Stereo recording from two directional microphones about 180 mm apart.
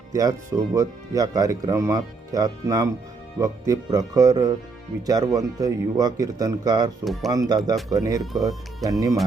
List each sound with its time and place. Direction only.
0.1 s speech: 20° right (ahead or behind)
7.0 s speech: centre (ahead or behind)
7.3 s speech: 20° right (ahead or behind)
8.2 s speech: centre (ahead or behind)
8.4 s speech: 20° right (ahead or behind)